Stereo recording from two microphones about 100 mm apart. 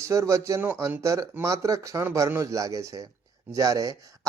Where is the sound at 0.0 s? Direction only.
30° right (ahead or behind).